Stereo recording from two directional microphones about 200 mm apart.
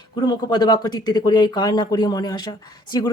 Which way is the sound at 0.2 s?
20° left (ahead or behind).